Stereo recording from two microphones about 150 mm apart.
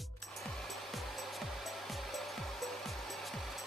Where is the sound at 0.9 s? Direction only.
Centre (ahead or behind).